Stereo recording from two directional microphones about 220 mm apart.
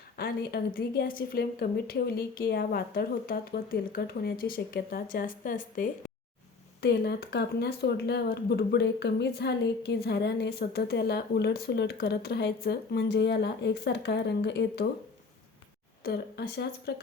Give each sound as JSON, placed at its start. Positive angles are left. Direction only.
{"t": 0.2, "sound": "a woman's voice", "side_deg": 45}
{"t": 16.0, "sound": "speech", "side_deg": 45}